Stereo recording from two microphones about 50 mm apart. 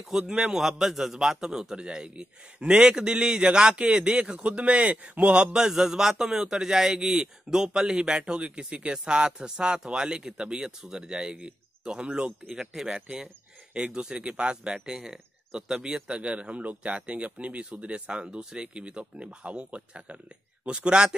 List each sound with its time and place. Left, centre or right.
0.2 s a man's voice: centre